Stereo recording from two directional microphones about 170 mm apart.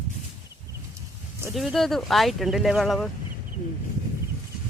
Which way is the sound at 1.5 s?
Centre (ahead or behind).